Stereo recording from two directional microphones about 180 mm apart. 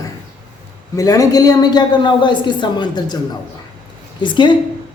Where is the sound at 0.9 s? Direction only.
20° left (ahead or behind).